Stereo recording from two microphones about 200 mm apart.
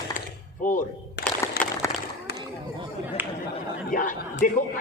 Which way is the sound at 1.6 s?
50° left (ahead or behind).